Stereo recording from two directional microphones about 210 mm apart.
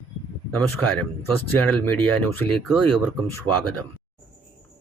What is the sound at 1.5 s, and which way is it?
Speech, 5° left (ahead or behind).